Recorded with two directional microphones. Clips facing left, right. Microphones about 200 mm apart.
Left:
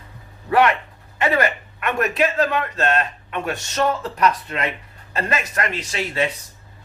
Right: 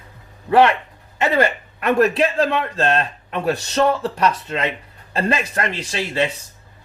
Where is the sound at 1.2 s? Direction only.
30° right (ahead or behind).